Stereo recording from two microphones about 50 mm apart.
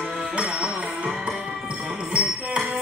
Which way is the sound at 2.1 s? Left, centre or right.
Right.